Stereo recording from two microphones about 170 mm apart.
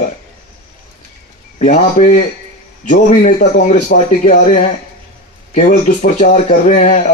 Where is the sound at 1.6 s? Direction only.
45° left (ahead or behind).